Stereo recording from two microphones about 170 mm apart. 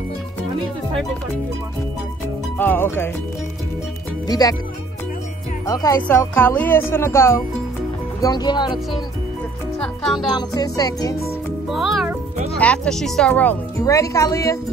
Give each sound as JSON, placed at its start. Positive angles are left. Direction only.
{"t": 2.5, "sound": "speech", "side_deg": 10}
{"t": 4.3, "sound": "music", "side_deg": 20}
{"t": 5.7, "sound": "music", "side_deg": 20}
{"t": 6.0, "sound": "speech", "side_deg": 10}
{"t": 8.2, "sound": "music", "side_deg": 25}
{"t": 9.8, "sound": "speech", "side_deg": 0}
{"t": 10.3, "sound": "music", "side_deg": 20}
{"t": 11.7, "sound": "speech", "side_deg": 0}